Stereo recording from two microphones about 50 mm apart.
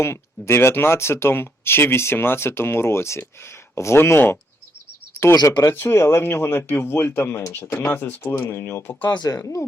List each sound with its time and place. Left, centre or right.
0.0 s speech: left
5.2 s speech: left
5.7 s speech: left
8.3 s speech: left
9.0 s speech: left